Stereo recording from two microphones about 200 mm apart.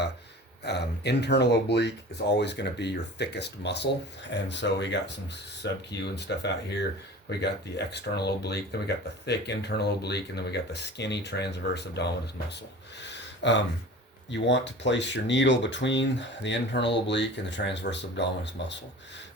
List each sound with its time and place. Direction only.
0.6 s speech: 55° left (ahead or behind)
13.0 s a sound: 60° left (ahead or behind)
14.3 s speech: 60° left (ahead or behind)